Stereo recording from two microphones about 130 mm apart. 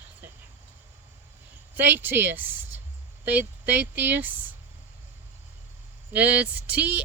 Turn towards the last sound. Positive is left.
turn(degrees=-10)  # may be behind; listen again after turning